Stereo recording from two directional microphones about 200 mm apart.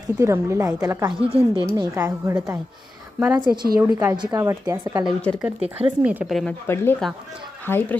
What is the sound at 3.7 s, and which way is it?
A woman's voice, 15° right (ahead or behind).